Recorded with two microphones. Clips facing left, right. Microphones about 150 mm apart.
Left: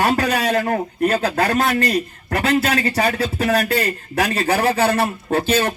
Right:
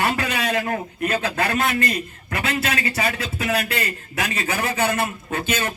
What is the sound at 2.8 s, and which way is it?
Speech, 55° left (ahead or behind).